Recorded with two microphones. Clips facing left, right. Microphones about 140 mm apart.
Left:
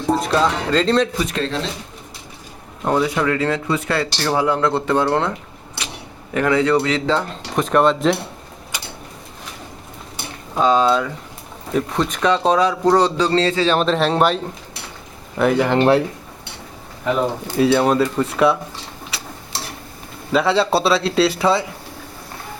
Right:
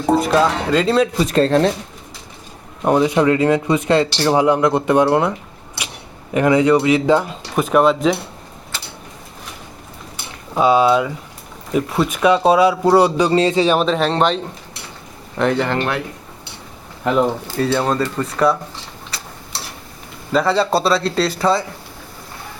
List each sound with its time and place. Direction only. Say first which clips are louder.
0.2 s speech: right 3 dB; 5° right (ahead or behind)
1.2 s speech: right 7 dB; 40° right (ahead or behind)
2.8 s speech: right 4 dB; 20° right (ahead or behind)
6.3 s speech: right 3 dB; 20° right (ahead or behind); by 8.2 s centre (ahead or behind)
8.7 s tick-tock: left 1 dB; 15° left (ahead or behind)
10.5 s speech: right 2 dB; 10° right (ahead or behind)
13.7 s speech: even; centre (ahead or behind)
17.6 s speech: left 3 dB; 10° left (ahead or behind)
20.3 s speech: even; 5° left (ahead or behind)